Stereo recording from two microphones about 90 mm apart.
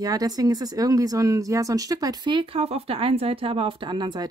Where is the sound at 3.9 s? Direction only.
55° right (ahead or behind).